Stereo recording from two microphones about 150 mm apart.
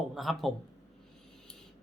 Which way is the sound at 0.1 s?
Centre (ahead or behind).